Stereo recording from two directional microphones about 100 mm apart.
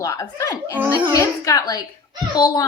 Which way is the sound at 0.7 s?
20° right (ahead or behind).